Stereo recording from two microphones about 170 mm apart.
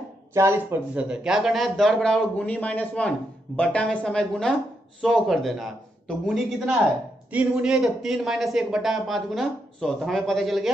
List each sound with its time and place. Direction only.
0.3 s speech: 15° right (ahead or behind)